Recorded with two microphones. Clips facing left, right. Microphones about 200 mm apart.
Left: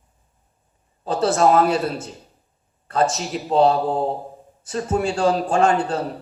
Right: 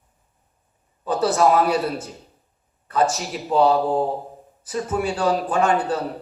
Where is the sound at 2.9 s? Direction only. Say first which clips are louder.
Left 1 dB; 25° left (ahead or behind).